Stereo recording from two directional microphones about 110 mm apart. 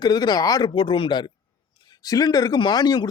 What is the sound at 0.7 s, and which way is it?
Speech, 50° left (ahead or behind).